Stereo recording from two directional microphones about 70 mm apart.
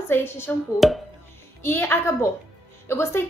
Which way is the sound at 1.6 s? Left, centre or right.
Left.